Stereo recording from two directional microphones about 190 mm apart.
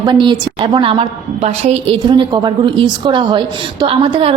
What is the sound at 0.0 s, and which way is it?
A woman's voice, 25° right (ahead or behind).